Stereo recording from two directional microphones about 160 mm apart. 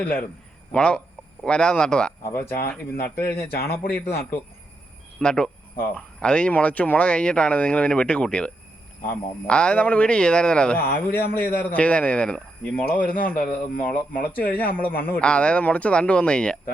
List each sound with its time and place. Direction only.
0.0 s speech: 10° left (ahead or behind)
2.2 s speech: 15° left (ahead or behind)
3.5 s a man's voice: 75° left (ahead or behind)
5.2 s speech: 5° left (ahead or behind)
13.1 s a man's voice: 65° left (ahead or behind)
13.4 s speech: 5° left (ahead or behind)